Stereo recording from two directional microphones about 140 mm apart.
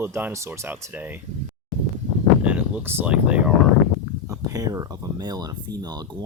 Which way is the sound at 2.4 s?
10° right (ahead or behind).